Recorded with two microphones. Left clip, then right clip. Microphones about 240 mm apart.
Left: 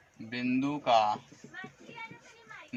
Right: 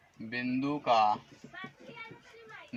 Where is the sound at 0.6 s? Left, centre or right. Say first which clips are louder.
Even; left.